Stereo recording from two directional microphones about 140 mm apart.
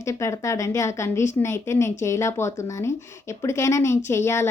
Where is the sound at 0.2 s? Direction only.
20° left (ahead or behind).